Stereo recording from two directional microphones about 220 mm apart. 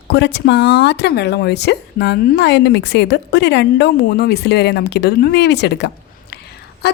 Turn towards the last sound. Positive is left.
turn(degrees=50)  # may be behind; listen again after turning